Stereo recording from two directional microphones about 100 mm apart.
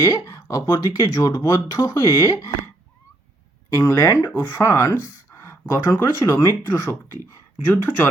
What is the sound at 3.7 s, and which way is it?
Speech, 40° left (ahead or behind).